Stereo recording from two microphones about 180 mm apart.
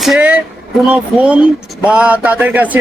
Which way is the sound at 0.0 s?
5° right (ahead or behind).